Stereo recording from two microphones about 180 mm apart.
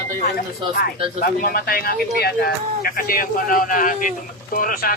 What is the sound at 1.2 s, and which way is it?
Speech, 55° left (ahead or behind).